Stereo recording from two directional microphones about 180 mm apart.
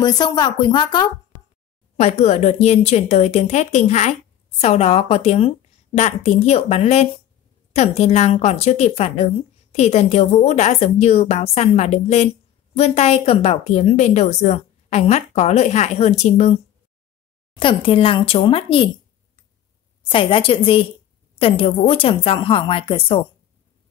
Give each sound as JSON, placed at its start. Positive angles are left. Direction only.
{"t": 0.0, "sound": "speech", "side_deg": 25}
{"t": 2.0, "sound": "a woman's voice", "side_deg": 35}
{"t": 17.6, "sound": "speech", "side_deg": 30}
{"t": 20.1, "sound": "a woman's voice", "side_deg": 30}